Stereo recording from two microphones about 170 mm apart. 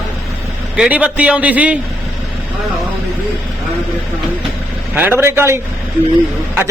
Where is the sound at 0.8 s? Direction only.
5° right (ahead or behind).